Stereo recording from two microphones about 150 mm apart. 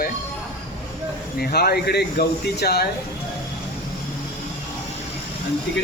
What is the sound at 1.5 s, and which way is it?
Speech, 90° left.